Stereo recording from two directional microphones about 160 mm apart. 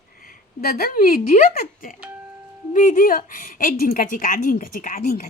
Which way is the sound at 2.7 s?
55° left (ahead or behind).